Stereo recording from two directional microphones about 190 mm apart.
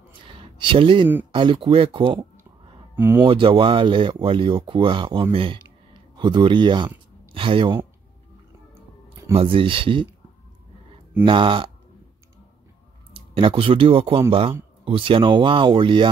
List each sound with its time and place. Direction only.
0.3 s a sound: 25° right (ahead or behind)
1.3 s speech: 25° right (ahead or behind)
3.2 s speech: 25° right (ahead or behind)
9.3 s speech: 30° right (ahead or behind)
11.2 s speech: 25° right (ahead or behind)
13.1 s speech: 30° right (ahead or behind)